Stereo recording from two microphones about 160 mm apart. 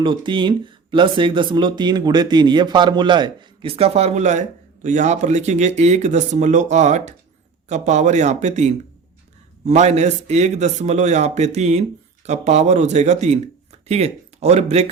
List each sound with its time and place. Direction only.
0.0 s a man's voice: 30° right (ahead or behind)